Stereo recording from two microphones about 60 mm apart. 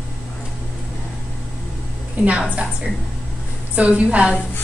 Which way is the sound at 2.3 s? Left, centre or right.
Right.